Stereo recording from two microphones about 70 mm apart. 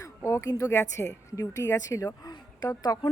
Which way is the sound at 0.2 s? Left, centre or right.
Left.